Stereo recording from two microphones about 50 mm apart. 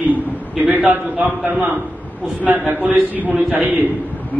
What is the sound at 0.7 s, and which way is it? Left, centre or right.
A man's voice, right.